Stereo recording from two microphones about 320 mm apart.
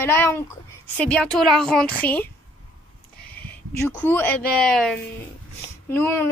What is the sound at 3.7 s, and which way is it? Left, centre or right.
Speech, centre.